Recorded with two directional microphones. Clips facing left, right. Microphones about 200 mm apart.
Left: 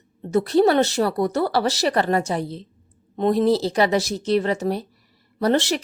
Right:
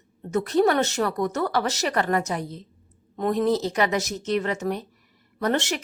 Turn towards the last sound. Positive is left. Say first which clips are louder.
# left 5 dB
turn(degrees=35)  # may be behind; listen again after turning